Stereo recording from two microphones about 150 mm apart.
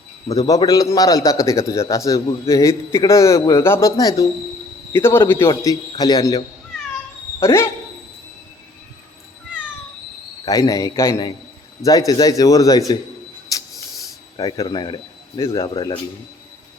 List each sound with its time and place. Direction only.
0.3 s a man's voice: 25° left (ahead or behind)
5.5 s a man's voice: 25° left (ahead or behind)
10.4 s a man's voice: 25° left (ahead or behind)
14.3 s a man's voice: 25° left (ahead or behind)